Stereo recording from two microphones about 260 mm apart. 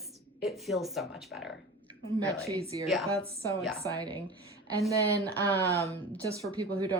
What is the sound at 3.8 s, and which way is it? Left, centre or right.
Speech, centre.